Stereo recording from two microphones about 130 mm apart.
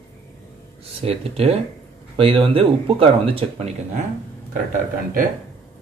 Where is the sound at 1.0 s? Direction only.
50° right (ahead or behind).